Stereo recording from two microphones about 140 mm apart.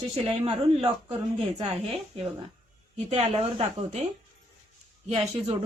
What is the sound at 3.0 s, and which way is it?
A woman's voice, 50° right (ahead or behind).